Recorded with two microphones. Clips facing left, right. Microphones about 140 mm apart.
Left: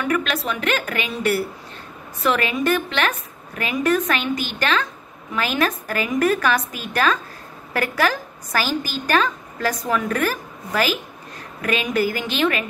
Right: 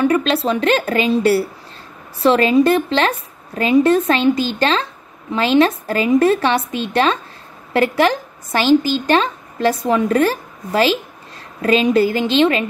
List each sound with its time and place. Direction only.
0.0 s a woman's voice: 30° right (ahead or behind)